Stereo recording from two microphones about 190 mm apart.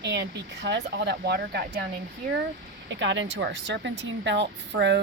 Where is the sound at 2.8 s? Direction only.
70° right (ahead or behind).